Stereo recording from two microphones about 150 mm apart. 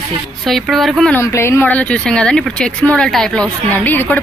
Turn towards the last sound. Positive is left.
turn(degrees=10)  # may be behind; listen again after turning